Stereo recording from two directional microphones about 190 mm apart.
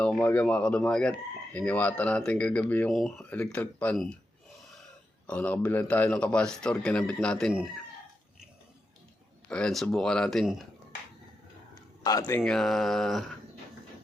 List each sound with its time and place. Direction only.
0.0 s a man's voice: 5° left (ahead or behind)
5.2 s a man's voice: 5° left (ahead or behind)
9.5 s a man's voice: 5° left (ahead or behind)
11.7 s a sound: 20° left (ahead or behind)
12.4 s a man's voice: centre (ahead or behind)